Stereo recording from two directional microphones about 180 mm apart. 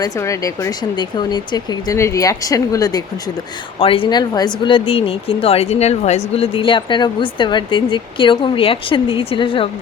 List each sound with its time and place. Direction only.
0.0 s speech: 20° left (ahead or behind)
3.8 s speech: 30° left (ahead or behind)